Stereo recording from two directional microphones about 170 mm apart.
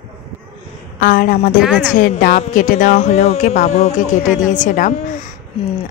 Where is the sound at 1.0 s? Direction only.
55° left (ahead or behind).